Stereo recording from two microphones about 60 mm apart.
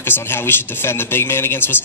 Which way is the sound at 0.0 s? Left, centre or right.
Left.